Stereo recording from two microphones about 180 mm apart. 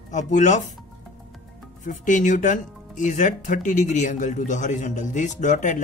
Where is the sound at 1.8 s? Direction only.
45° left (ahead or behind).